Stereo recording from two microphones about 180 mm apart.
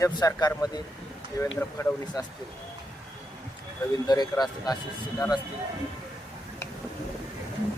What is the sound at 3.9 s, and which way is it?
Speech, 20° left (ahead or behind).